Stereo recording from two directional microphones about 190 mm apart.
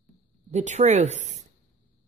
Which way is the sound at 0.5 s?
35° right (ahead or behind).